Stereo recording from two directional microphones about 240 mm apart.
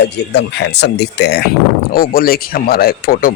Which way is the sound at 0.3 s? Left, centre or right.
Left.